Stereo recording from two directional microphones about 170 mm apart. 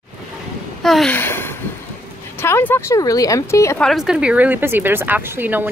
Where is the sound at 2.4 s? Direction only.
15° left (ahead or behind).